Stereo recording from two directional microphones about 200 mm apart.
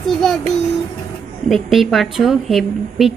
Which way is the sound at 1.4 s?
Centre (ahead or behind).